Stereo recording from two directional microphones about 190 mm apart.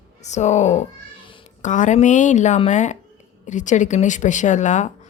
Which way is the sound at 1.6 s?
40° left (ahead or behind).